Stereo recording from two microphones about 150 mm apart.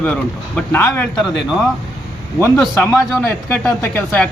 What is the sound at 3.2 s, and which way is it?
A man's voice, 10° left (ahead or behind).